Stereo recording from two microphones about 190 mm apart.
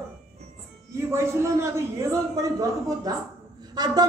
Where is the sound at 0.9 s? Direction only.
15° right (ahead or behind).